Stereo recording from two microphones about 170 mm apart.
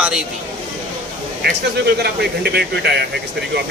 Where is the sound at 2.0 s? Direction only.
75° right (ahead or behind).